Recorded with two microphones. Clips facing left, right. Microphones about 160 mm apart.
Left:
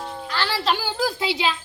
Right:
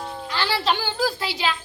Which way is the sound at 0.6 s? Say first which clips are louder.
Left 1 dB; 5° left (ahead or behind).